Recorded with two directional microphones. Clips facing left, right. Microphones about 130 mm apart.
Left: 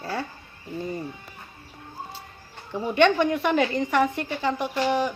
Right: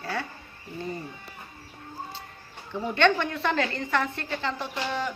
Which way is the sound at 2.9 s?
15° left (ahead or behind).